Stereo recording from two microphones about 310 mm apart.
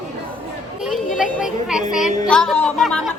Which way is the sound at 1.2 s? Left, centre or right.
Centre.